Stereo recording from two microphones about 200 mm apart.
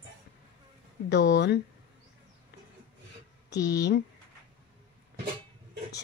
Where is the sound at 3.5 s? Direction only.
60° left (ahead or behind).